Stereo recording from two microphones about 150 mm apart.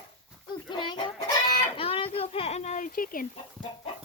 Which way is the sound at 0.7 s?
30° left (ahead or behind).